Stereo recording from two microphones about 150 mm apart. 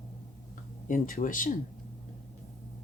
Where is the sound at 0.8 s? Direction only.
65° left (ahead or behind).